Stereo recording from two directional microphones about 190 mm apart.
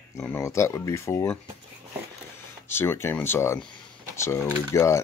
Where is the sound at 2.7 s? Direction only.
10° left (ahead or behind).